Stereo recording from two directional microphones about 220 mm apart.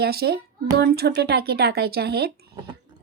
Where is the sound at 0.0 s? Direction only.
45° right (ahead or behind).